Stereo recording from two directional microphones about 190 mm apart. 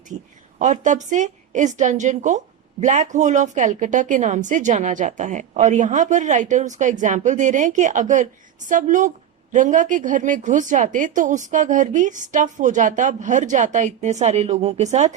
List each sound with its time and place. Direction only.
0.6 s a woman's voice: 40° right (ahead or behind)